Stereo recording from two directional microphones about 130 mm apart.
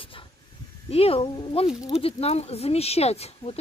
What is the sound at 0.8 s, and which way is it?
Speech, 50° left (ahead or behind).